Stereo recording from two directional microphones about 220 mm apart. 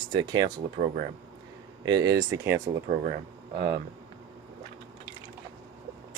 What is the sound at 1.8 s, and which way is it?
Speech, 15° right (ahead or behind).